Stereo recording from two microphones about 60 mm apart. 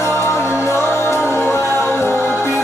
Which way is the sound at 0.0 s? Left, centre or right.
Left.